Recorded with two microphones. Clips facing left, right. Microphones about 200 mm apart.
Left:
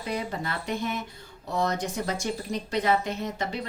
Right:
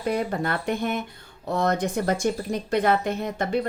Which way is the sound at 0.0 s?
55° right (ahead or behind).